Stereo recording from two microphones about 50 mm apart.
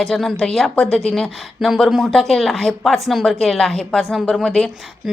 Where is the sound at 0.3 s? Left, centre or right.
Centre.